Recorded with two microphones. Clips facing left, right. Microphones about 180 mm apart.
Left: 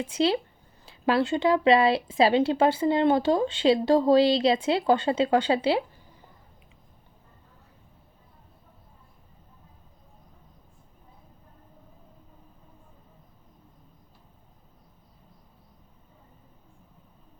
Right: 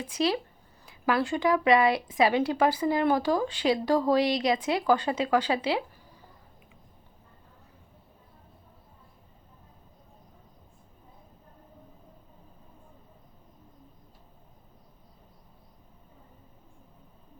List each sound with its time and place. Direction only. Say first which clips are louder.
0.0 s speech: left 3 dB; 30° left (ahead or behind)